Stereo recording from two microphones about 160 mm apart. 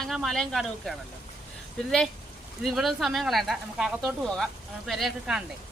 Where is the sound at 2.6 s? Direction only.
Centre (ahead or behind).